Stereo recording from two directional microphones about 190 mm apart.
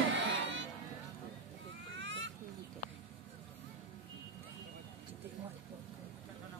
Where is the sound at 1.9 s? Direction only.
75° right (ahead or behind).